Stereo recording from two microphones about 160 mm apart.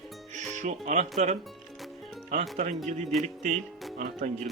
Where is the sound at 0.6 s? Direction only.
50° right (ahead or behind).